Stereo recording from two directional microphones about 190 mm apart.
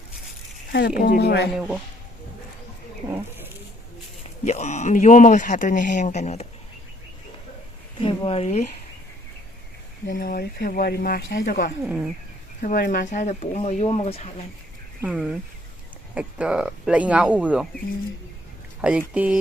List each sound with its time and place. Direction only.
0.7 s speech: 55° left (ahead or behind)
1.5 s speech: centre (ahead or behind)
3.1 s speech: 10° right (ahead or behind)
4.4 s speech: 35° left (ahead or behind)
8.0 s speech: 30° left (ahead or behind)
10.1 s speech: 50° left (ahead or behind)
11.9 s speech: 5° right (ahead or behind)
12.6 s speech: 50° left (ahead or behind)
15.0 s speech: 5° right (ahead or behind)
18.8 s speech: 5° right (ahead or behind)